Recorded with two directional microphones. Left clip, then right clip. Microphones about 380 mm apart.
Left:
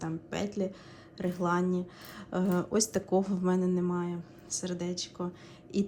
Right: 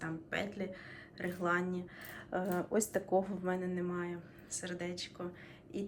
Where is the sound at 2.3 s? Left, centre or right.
Right.